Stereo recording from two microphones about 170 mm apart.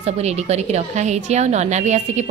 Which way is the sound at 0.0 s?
40° right (ahead or behind).